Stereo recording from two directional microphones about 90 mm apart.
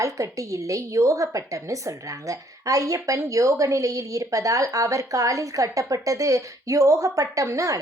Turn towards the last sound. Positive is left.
turn(degrees=-40)  # may be behind; listen again after turning